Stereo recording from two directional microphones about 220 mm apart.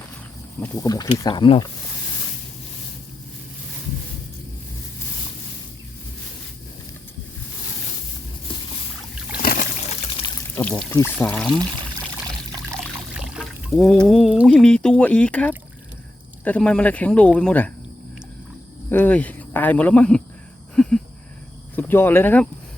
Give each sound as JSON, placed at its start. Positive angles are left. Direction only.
{"t": 0.6, "sound": "speech", "side_deg": 15}
{"t": 9.4, "sound": "trickle", "side_deg": 40}
{"t": 10.2, "sound": "pour", "side_deg": 30}
{"t": 10.5, "sound": "speech", "side_deg": 5}
{"t": 12.3, "sound": "pour", "side_deg": -20}
{"t": 12.8, "sound": "speech", "side_deg": -5}
{"t": 18.9, "sound": "speech", "side_deg": 10}
{"t": 20.8, "sound": "a sound", "side_deg": 5}
{"t": 21.8, "sound": "speech", "side_deg": 10}